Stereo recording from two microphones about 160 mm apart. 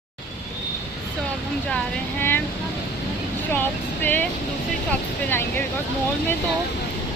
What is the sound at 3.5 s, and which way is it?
Speech, 10° left (ahead or behind).